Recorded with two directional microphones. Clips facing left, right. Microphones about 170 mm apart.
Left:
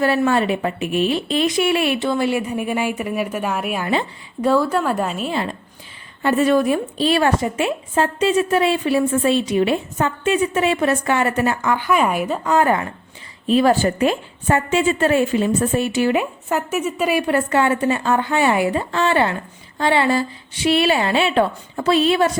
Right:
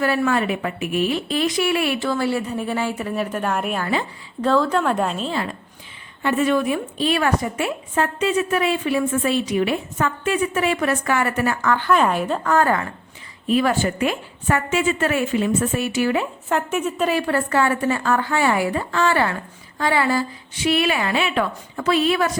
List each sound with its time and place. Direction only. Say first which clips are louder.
0.0 s a woman's voice: left 3 dB; 25° left (ahead or behind); by 5.3 s 5° left (ahead or behind)
6.2 s a woman's voice: left 3 dB; 35° left (ahead or behind); by 12.9 s 20° left (ahead or behind)
13.5 s a woman's voice: left 4 dB; 30° left (ahead or behind)
16.5 s a woman's voice: right 1 dB; 5° left (ahead or behind); by 22.3 s 25° left (ahead or behind)